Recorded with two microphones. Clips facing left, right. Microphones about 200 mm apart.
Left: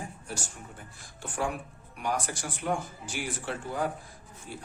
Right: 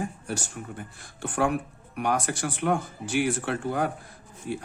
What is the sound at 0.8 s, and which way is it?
Speech, 65° right (ahead or behind).